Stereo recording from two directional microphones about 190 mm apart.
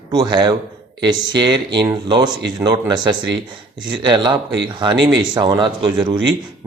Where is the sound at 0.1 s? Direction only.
20° right (ahead or behind).